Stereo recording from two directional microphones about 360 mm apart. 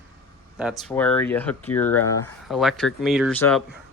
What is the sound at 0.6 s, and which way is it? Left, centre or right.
Speech, centre.